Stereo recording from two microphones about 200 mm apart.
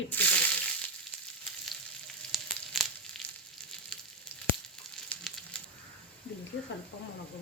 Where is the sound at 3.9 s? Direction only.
Centre (ahead or behind).